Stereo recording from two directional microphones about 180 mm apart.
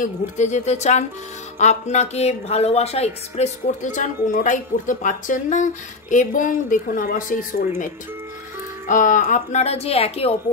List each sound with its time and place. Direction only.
0.0 s a woman's voice: 40° left (ahead or behind)
8.8 s a woman's voice: 45° left (ahead or behind)